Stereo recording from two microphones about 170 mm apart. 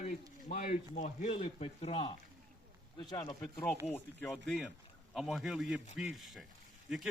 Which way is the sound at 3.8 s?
Centre (ahead or behind).